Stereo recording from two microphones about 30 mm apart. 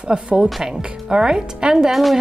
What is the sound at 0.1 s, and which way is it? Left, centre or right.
A woman's voice, right.